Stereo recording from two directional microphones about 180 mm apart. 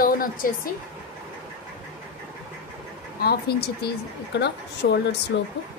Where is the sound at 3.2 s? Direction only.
60° left (ahead or behind).